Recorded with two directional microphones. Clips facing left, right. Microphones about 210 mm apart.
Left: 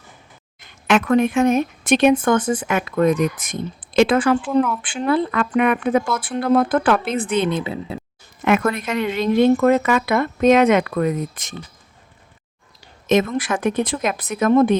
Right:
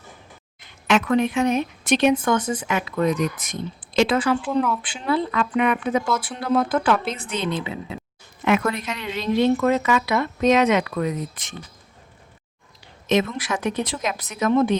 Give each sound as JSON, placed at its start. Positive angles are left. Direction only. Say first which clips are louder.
{"t": 0.6, "sound": "speech", "louder": "left 3 dB", "side_deg": 50}
{"t": 4.4, "sound": "speech", "louder": "left 3 dB", "side_deg": 0}
{"t": 4.8, "sound": "a woman's voice", "louder": "left 4 dB", "side_deg": 50}
{"t": 7.6, "sound": "speech", "louder": "left 4 dB", "side_deg": 35}
{"t": 8.4, "sound": "speech", "louder": "left 3 dB", "side_deg": 50}
{"t": 13.1, "sound": "speech", "louder": "left 4 dB", "side_deg": 50}